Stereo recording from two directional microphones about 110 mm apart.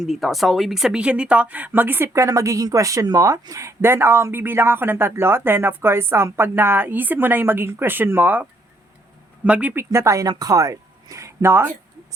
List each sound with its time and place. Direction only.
0.0 s speech: centre (ahead or behind)
9.7 s a woman's voice: 25° right (ahead or behind)